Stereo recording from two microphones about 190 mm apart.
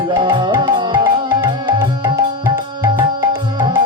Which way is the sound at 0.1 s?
25° right (ahead or behind).